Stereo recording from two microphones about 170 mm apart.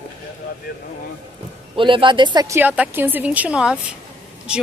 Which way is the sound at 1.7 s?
30° right (ahead or behind).